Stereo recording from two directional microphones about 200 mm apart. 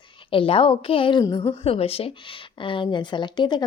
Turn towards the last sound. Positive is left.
turn(degrees=20)  # may be behind; listen again after turning